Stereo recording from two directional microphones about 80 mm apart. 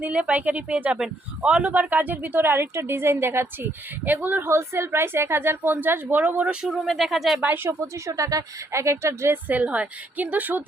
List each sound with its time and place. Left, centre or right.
0.0 s speech: centre
6.8 s speech: centre
7.4 s speech: right
9.5 s speech: centre